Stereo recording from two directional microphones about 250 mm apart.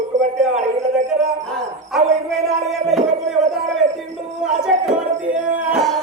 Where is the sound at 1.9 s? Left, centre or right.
Centre.